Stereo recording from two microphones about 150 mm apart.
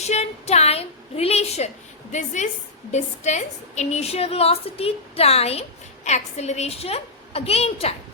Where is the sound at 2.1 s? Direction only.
55° left (ahead or behind).